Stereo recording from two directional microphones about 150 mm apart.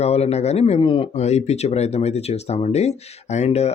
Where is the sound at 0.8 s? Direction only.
35° left (ahead or behind).